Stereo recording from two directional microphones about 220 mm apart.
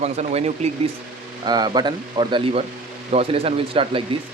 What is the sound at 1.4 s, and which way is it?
Speech, 20° right (ahead or behind).